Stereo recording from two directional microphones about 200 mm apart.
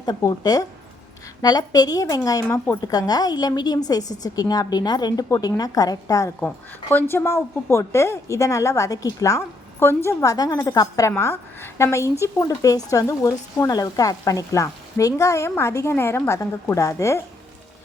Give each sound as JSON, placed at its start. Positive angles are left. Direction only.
{"t": 0.0, "sound": "a woman's voice", "side_deg": 20}